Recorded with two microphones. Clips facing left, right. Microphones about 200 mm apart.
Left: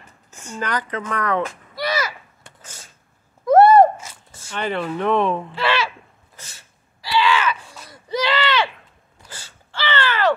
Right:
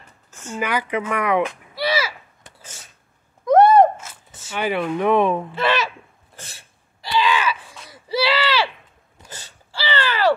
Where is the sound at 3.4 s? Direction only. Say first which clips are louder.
Left 1 dB; 5° left (ahead or behind).